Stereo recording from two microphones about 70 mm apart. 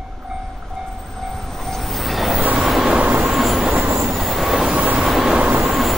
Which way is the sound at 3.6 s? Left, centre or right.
Centre.